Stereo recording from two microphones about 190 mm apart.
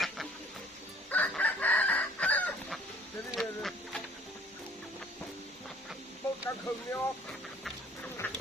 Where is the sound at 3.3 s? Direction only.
Centre (ahead or behind).